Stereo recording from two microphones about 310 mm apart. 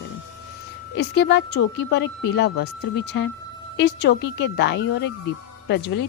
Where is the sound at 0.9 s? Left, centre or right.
Left.